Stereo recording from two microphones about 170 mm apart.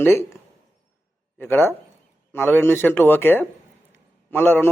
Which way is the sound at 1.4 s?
10° left (ahead or behind).